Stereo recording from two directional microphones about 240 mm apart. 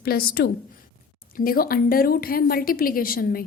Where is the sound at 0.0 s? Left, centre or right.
Left.